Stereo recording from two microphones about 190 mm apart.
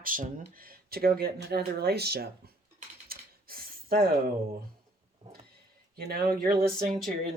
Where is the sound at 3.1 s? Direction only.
50° right (ahead or behind).